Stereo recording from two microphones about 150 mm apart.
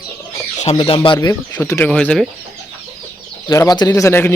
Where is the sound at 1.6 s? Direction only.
15° left (ahead or behind).